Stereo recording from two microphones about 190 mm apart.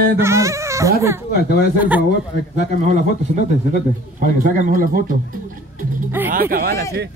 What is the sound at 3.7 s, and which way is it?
A man's voice, 45° right (ahead or behind).